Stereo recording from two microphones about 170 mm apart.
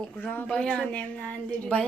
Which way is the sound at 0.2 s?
10° left (ahead or behind).